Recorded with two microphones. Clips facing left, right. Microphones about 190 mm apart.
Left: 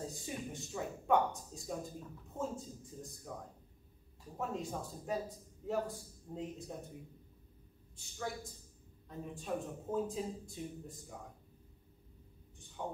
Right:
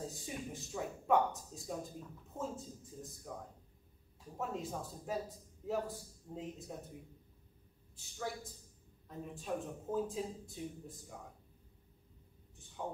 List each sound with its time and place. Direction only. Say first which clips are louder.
0.0 s a sound: left 1 dB; centre (ahead or behind)
2.3 s speech: left 2 dB; centre (ahead or behind)
7.9 s a woman's voice: even; centre (ahead or behind)
12.8 s speech: even; 5° right (ahead or behind)